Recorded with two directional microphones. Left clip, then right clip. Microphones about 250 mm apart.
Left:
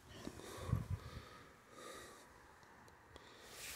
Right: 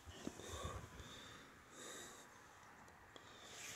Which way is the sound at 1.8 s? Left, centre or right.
Centre.